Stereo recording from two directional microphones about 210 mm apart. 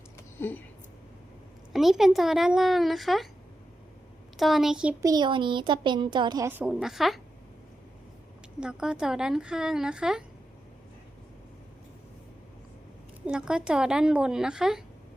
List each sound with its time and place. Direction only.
0.3 s speech: 10° left (ahead or behind)
1.7 s a woman's voice: centre (ahead or behind)
4.4 s a woman's voice: centre (ahead or behind)
5.0 s a woman's voice: 20° right (ahead or behind); by 7.2 s centre (ahead or behind)
8.6 s a woman's voice: 5° right (ahead or behind)
13.2 s a woman's voice: 5° right (ahead or behind)